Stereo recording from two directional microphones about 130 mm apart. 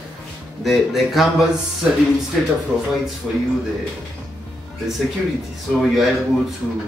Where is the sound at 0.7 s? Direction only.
Centre (ahead or behind).